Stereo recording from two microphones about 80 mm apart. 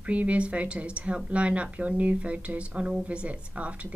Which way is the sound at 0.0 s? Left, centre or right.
Centre.